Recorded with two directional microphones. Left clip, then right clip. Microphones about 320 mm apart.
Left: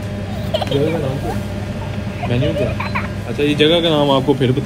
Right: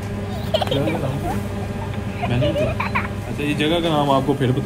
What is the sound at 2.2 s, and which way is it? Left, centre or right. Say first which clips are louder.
Speech: left 2 dB; centre.